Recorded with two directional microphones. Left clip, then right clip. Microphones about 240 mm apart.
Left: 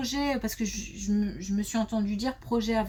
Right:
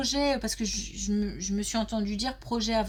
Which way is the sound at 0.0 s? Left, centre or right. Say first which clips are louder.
Right 3 dB; right.